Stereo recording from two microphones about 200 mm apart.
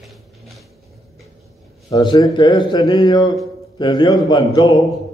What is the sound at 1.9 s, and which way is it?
A man's voice, 20° left (ahead or behind).